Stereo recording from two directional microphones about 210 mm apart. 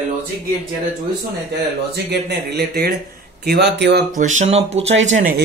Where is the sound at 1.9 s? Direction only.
55° right (ahead or behind).